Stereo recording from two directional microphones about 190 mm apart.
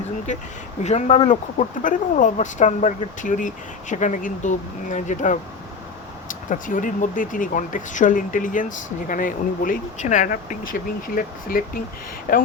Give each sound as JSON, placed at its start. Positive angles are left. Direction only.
{"t": 0.3, "sound": "speech", "side_deg": 40}